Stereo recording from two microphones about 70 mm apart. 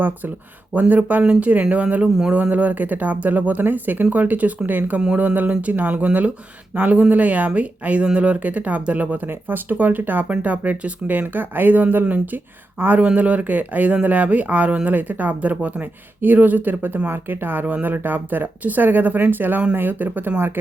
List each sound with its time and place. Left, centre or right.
0.7 s speech: right